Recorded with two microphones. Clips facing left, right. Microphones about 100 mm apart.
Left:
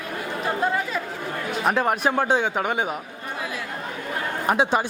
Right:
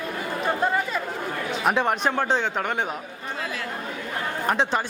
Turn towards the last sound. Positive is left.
turn(degrees=10)  # may be behind; listen again after turning